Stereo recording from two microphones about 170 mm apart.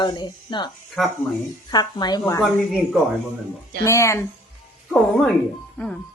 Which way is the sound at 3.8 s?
15° left (ahead or behind).